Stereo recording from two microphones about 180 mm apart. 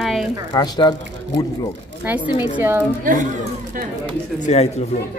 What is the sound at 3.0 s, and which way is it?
Speech, 50° right (ahead or behind).